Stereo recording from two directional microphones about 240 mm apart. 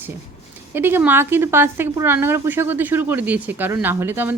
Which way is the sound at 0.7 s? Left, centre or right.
Centre.